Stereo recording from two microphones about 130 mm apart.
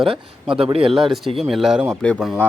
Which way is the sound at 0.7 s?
45° right (ahead or behind).